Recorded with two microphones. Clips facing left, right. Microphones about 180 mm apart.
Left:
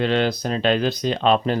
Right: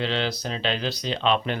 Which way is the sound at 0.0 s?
50° left (ahead or behind).